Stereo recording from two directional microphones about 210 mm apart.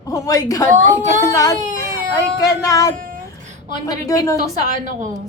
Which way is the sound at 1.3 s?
15° left (ahead or behind).